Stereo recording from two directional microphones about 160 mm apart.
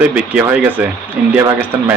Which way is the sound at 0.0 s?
10° right (ahead or behind).